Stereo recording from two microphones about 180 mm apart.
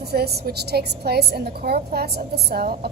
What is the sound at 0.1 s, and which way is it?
A woman's voice, 60° right (ahead or behind).